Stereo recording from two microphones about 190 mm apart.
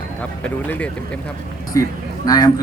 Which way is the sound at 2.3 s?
20° left (ahead or behind).